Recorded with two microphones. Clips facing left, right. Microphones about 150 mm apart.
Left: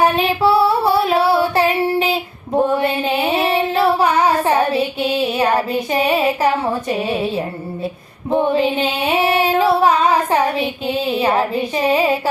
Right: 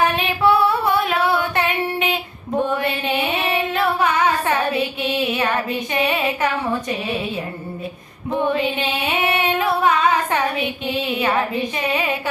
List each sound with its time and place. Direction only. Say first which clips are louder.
0.2 s female singing: left 3 dB; 30° left (ahead or behind)
2.7 s child singing: left 4 dB; 35° left (ahead or behind)
8.3 s female singing: left 4 dB; 35° left (ahead or behind)